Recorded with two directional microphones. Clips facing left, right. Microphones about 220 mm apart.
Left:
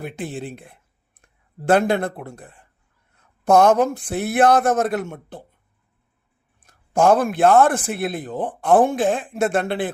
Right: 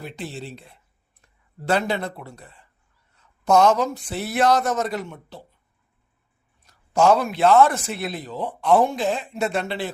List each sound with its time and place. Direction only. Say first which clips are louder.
0.0 s a sound: left 4 dB; 50° left (ahead or behind)
1.6 s a man's voice: left 6 dB; 50° left (ahead or behind)
6.6 s a man's voice: left 1 dB; 50° left (ahead or behind)